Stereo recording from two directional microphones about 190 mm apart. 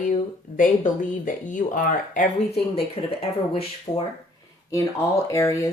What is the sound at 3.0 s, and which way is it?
Speech, 30° left (ahead or behind).